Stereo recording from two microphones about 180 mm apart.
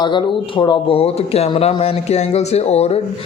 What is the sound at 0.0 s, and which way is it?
Speech, 25° left (ahead or behind).